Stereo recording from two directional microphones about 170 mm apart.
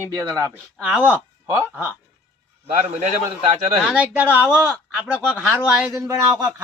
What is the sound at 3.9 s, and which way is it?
Speech, 10° right (ahead or behind).